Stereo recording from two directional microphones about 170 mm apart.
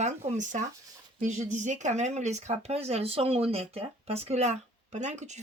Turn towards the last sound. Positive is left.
turn(degrees=-45)  # may be behind; listen again after turning